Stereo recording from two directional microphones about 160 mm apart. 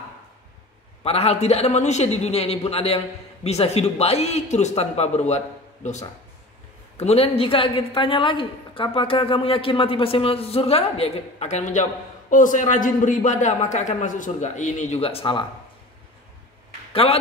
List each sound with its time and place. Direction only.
1.0 s a woman's voice: 40° left (ahead or behind)
16.9 s a man's voice: 35° left (ahead or behind)